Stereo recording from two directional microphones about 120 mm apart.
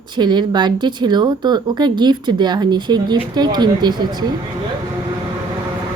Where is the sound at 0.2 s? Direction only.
40° right (ahead or behind).